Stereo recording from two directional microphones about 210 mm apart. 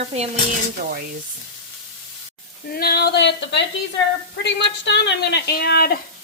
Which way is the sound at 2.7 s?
45° left (ahead or behind).